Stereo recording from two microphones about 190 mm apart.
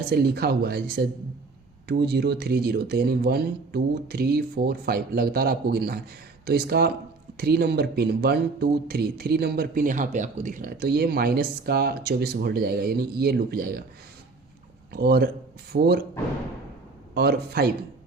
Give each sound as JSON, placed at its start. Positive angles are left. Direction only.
{"t": 0.1, "sound": "speech", "side_deg": -55}
{"t": 14.9, "sound": "speech", "side_deg": -55}
{"t": 17.2, "sound": "speech", "side_deg": -55}